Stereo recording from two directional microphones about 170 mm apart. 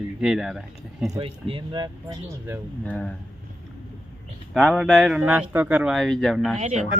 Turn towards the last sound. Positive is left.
turn(degrees=-45)  # may be behind; listen again after turning